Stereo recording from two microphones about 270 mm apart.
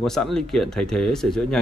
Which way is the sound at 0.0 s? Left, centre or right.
Centre.